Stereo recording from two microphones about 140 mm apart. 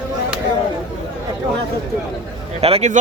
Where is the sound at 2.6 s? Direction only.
45° right (ahead or behind).